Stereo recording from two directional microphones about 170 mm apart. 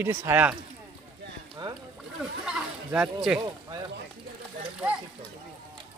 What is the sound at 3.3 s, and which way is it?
Speech, 5° right (ahead or behind).